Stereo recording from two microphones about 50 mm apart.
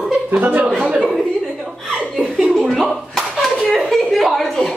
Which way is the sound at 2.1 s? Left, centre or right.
Centre.